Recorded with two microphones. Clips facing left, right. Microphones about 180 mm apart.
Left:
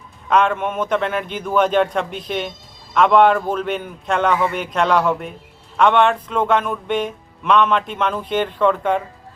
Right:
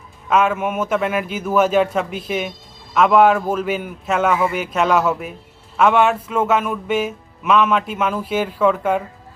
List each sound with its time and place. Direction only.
0.3 s speech: 5° right (ahead or behind)